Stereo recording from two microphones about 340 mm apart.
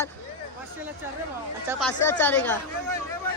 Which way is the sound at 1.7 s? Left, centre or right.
Centre.